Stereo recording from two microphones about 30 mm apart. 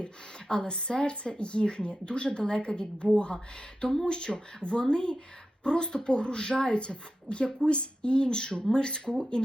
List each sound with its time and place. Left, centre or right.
0.4 s speech: left